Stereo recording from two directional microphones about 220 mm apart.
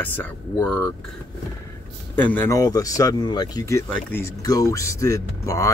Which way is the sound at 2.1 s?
10° left (ahead or behind).